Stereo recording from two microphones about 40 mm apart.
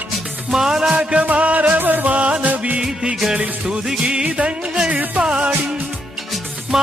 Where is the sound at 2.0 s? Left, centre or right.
Right.